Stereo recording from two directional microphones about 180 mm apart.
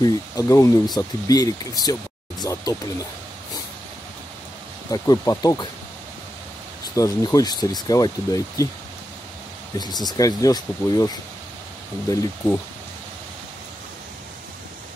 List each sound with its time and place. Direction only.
0.0 s speech: 20° left (ahead or behind)
4.9 s speech: 20° left (ahead or behind)
7.0 s speech: 20° left (ahead or behind)
10.0 s speech: 20° left (ahead or behind)